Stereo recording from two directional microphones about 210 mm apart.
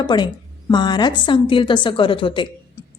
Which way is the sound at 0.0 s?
20° left (ahead or behind).